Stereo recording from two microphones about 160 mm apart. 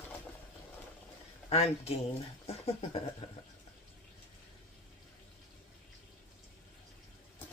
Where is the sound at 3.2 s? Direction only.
40° left (ahead or behind).